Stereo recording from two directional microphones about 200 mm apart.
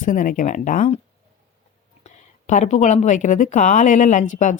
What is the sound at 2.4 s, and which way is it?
Speech, 35° left (ahead or behind).